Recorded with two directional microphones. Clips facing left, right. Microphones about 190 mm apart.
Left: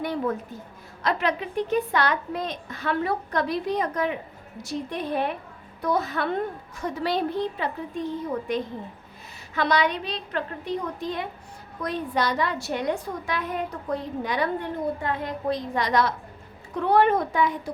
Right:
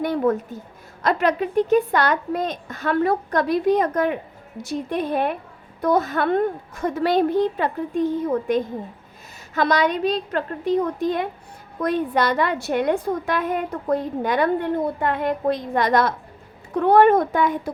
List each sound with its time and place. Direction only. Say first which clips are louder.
0.0 s a woman's voice: right 6 dB; 50° right (ahead or behind)